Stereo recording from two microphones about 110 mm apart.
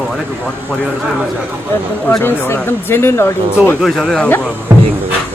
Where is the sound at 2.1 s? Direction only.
20° left (ahead or behind).